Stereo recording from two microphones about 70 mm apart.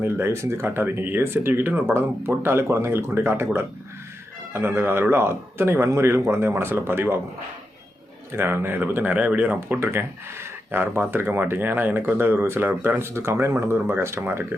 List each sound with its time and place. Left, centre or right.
0.0 s speech: right
8.3 s speech: right